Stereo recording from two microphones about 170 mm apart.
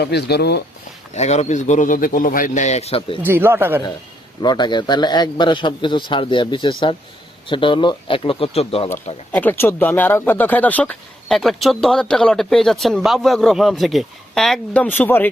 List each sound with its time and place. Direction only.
0.0 s speech: 75° left (ahead or behind)
1.1 s a man's voice: 40° left (ahead or behind)
3.2 s a man's voice: 15° right (ahead or behind)
4.4 s a man's voice: 25° left (ahead or behind)
9.3 s speech: 10° left (ahead or behind)